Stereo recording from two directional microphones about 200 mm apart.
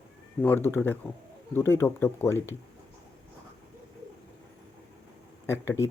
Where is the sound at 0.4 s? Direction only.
10° left (ahead or behind).